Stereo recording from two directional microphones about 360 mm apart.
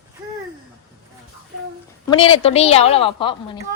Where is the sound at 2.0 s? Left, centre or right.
Centre.